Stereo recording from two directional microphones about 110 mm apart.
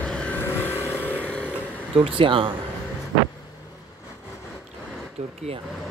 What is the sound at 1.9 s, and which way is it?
Speech, 55° right (ahead or behind).